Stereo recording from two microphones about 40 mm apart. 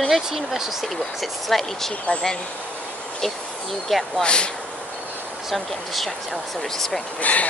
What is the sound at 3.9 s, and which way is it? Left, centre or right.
Speech, centre.